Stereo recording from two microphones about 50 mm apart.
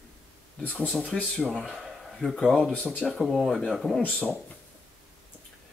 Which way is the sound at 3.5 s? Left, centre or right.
Centre.